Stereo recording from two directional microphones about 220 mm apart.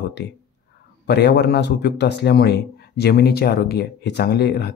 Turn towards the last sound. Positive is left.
turn(degrees=50)  # may be behind; listen again after turning